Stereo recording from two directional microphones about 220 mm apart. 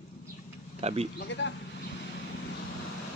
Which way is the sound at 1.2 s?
55° left (ahead or behind).